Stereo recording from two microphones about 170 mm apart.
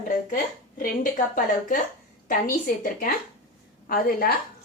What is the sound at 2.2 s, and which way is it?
A woman's voice, 55° left (ahead or behind).